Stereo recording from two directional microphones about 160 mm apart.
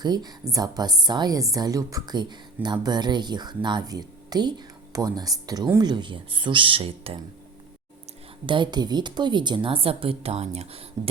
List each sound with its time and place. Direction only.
0.0 s speech: 25° right (ahead or behind)
8.4 s a woman's voice: 30° right (ahead or behind)